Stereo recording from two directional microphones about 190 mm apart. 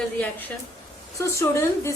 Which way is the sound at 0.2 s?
10° left (ahead or behind).